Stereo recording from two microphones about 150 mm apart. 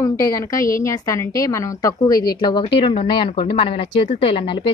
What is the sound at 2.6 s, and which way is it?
A woman's voice, 35° left (ahead or behind).